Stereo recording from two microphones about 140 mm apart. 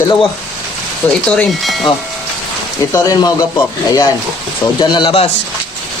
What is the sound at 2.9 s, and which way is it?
Speech, 25° left (ahead or behind).